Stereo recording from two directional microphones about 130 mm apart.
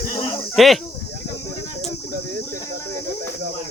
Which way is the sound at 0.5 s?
Centre (ahead or behind).